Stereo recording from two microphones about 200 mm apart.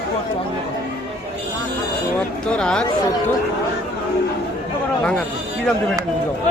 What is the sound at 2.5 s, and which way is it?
Speech, 5° left (ahead or behind).